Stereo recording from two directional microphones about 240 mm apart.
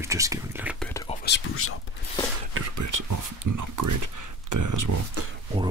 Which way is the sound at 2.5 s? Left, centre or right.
Right.